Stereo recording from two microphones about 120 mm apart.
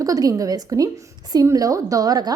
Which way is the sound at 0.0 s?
30° right (ahead or behind).